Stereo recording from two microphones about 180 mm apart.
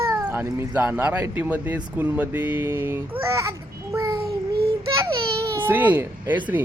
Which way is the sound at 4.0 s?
15° right (ahead or behind).